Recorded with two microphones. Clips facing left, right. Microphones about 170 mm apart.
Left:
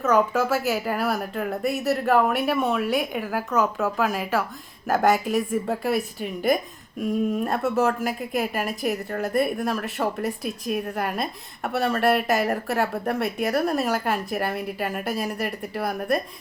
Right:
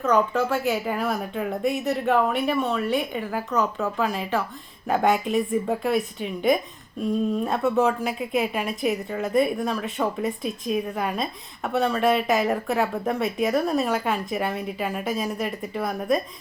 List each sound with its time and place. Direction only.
0.0 s a woman's voice: 5° left (ahead or behind)